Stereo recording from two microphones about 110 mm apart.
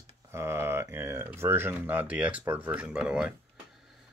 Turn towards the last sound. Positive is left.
turn(degrees=-10)  # may be behind; listen again after turning